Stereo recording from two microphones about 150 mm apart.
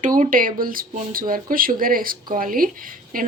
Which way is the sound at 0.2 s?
65° right (ahead or behind).